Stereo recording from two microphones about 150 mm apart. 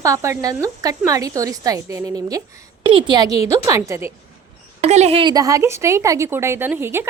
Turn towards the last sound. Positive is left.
turn(degrees=-15)  # may be behind; listen again after turning